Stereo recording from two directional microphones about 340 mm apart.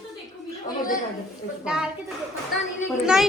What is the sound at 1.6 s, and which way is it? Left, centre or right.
Speech, centre.